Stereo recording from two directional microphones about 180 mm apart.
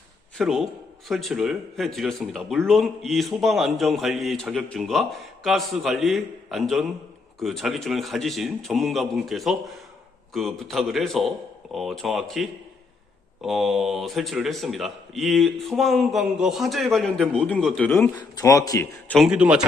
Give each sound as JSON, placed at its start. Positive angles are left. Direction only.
{"t": 0.3, "sound": "speech", "side_deg": 0}
{"t": 18.1, "sound": "speech", "side_deg": 20}
{"t": 19.0, "sound": "speech", "side_deg": 5}